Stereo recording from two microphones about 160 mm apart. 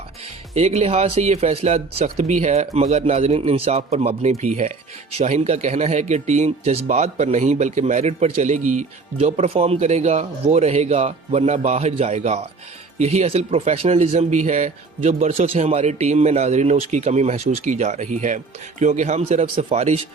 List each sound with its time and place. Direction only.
0.5 s speech: 40° right (ahead or behind)